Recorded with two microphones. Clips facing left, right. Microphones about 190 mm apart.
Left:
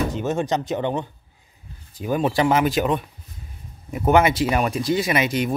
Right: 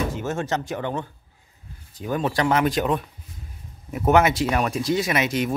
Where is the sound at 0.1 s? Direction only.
15° left (ahead or behind).